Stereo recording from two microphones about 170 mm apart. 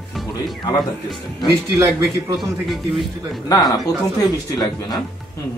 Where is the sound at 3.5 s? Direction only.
25° left (ahead or behind).